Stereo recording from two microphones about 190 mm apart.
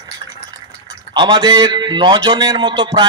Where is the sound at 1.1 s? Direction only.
25° right (ahead or behind).